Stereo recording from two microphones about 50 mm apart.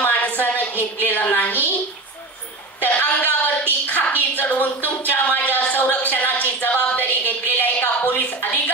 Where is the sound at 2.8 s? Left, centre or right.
Left.